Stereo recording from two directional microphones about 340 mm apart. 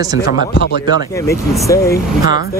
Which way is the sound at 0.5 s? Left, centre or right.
Left.